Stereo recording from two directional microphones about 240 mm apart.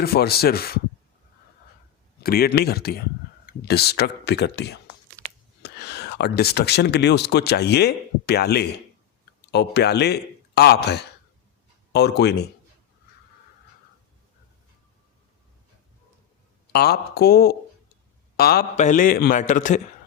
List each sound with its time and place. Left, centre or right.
0.0 s speech: left
2.2 s speech: left
16.7 s speech: left